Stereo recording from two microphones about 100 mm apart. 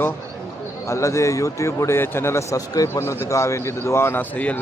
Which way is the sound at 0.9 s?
30° left (ahead or behind).